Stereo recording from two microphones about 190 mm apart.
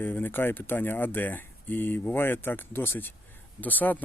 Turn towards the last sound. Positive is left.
turn(degrees=10)  # may be behind; listen again after turning